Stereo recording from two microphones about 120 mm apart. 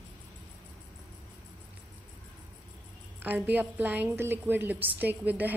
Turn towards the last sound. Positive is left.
turn(degrees=-15)  # may be behind; listen again after turning